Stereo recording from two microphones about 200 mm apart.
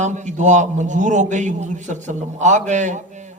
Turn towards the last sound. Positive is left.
turn(degrees=-35)  # may be behind; listen again after turning